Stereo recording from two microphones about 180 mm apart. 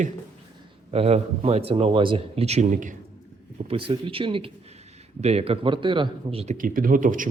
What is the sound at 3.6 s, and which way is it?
Speech, 30° right (ahead or behind).